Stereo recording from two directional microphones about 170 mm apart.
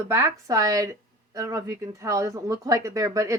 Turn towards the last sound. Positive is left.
turn(degrees=-15)  # may be behind; listen again after turning